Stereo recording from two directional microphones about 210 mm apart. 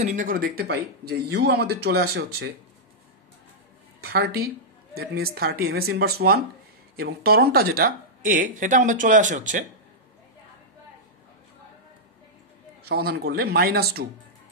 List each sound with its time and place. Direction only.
0.0 s speech: 35° right (ahead or behind)
4.0 s speech: 50° right (ahead or behind)
12.8 s speech: 50° right (ahead or behind)